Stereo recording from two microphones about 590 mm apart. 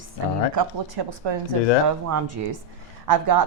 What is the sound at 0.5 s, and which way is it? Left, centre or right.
Speech, right.